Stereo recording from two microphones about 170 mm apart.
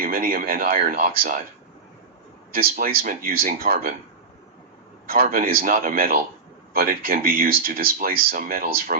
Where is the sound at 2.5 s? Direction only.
60° right (ahead or behind).